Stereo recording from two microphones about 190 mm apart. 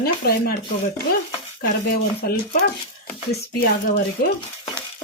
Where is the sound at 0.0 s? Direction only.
55° left (ahead or behind).